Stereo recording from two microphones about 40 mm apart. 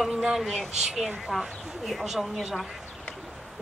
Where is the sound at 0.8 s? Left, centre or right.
Centre.